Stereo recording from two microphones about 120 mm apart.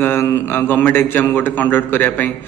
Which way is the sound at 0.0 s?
15° left (ahead or behind).